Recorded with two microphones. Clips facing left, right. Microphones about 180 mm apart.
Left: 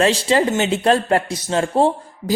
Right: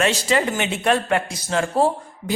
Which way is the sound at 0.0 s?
30° left (ahead or behind).